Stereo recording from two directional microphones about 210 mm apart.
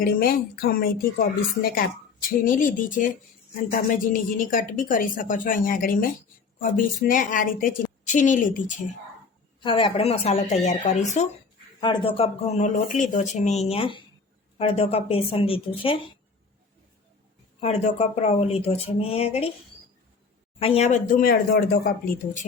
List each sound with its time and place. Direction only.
0.0 s a woman's voice: 45° left (ahead or behind)
9.6 s a woman's voice: 25° left (ahead or behind)
11.8 s speech: 20° left (ahead or behind)
17.6 s speech: 30° left (ahead or behind)
20.6 s a woman's voice: 30° left (ahead or behind); by 22.4 s 45° left (ahead or behind)